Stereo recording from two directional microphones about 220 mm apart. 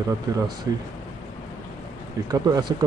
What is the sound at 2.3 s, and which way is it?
Speech, 20° right (ahead or behind).